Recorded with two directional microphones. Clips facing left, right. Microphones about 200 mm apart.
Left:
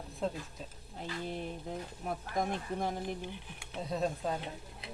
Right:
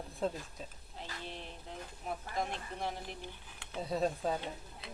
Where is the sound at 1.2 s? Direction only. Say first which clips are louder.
Left 8 dB; 45° left (ahead or behind).